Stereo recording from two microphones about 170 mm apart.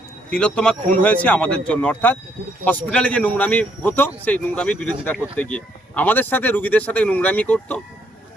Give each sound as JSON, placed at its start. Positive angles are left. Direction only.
{"t": 0.3, "sound": "speech", "side_deg": 5}